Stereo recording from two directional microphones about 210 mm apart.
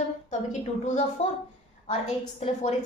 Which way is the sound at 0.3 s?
35° left (ahead or behind).